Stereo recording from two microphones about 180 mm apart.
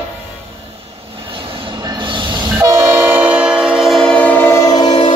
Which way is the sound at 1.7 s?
25° right (ahead or behind).